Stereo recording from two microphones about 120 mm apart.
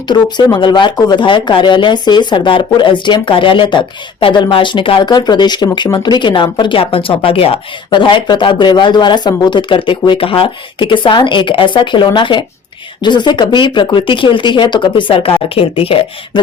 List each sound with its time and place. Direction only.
0.1 s speech: 40° left (ahead or behind)